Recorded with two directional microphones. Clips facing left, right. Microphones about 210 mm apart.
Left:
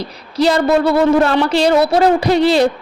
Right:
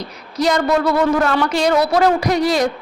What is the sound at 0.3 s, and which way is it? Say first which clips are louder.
A woman's voice: left 3 dB; 30° left (ahead or behind).